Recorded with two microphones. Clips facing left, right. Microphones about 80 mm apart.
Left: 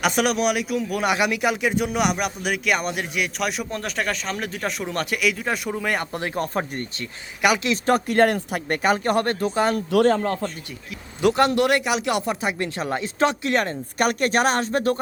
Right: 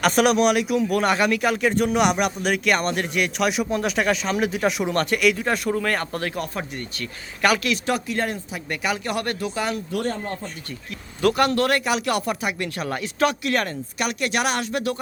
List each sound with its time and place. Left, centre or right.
0.0 s speech: centre
1.1 s speech: centre
6.4 s speech: left
7.0 s speech: centre
7.9 s speech: left
8.8 s speech: left
9.9 s speech: left
11.2 s speech: left
14.0 s speech: left